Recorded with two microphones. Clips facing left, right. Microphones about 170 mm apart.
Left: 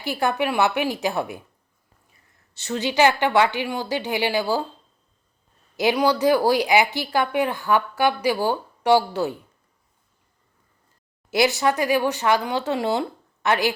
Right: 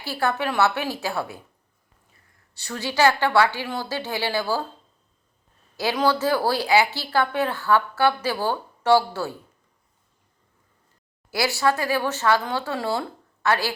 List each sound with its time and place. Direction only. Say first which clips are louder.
0.0 s speech: left 2 dB; 15° left (ahead or behind)
2.6 s speech: left 2 dB; 20° left (ahead or behind)
5.7 s speech: left 2 dB; 15° left (ahead or behind)
11.3 s speech: left 3 dB; 20° left (ahead or behind)